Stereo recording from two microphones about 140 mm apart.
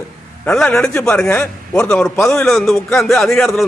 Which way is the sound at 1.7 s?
5° left (ahead or behind).